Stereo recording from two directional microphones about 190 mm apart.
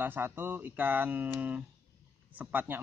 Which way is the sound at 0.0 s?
10° right (ahead or behind).